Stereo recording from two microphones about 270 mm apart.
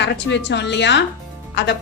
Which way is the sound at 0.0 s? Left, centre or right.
Left.